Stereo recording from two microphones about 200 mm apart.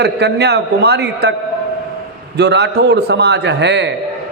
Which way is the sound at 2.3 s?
60° right (ahead or behind).